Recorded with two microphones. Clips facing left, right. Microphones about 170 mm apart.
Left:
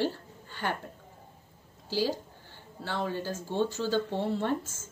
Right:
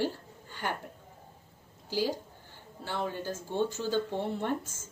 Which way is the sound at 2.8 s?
15° right (ahead or behind).